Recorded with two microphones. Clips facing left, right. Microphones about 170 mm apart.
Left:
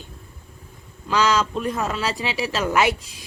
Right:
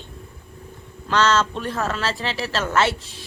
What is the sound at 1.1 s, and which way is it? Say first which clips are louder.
A woman's voice: right 1 dB; 10° left (ahead or behind).